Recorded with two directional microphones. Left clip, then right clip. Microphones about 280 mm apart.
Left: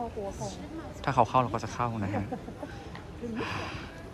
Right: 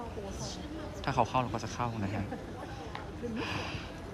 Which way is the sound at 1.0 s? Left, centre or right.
Centre.